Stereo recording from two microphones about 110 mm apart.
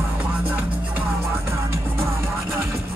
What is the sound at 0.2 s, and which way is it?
Music, 15° right (ahead or behind).